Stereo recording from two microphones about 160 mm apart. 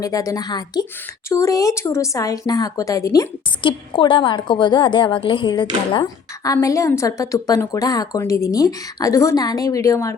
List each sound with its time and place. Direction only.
0.0 s a woman's voice: 20° left (ahead or behind)